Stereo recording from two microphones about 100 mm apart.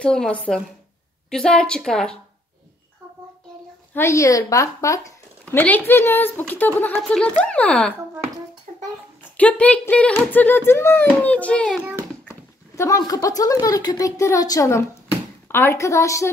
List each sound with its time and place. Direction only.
0.0 s speech: 10° left (ahead or behind)
3.9 s a woman's voice: 30° left (ahead or behind)
5.5 s speech: 20° left (ahead or behind)
9.4 s speech: 15° left (ahead or behind)
11.8 s a sound: 25° right (ahead or behind)
12.3 s speech: 30° left (ahead or behind)